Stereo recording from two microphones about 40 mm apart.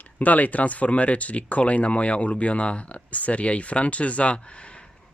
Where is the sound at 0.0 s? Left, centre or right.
Left.